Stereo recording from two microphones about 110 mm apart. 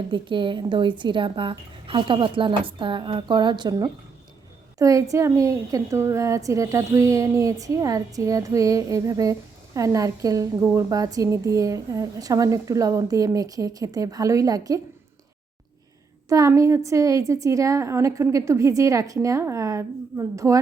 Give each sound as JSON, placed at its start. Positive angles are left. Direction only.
{"t": 0.1, "sound": "a woman's voice", "side_deg": -45}
{"t": 16.3, "sound": "a woman's voice", "side_deg": -30}